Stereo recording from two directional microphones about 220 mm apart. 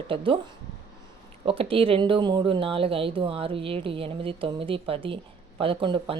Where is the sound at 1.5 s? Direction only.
25° right (ahead or behind).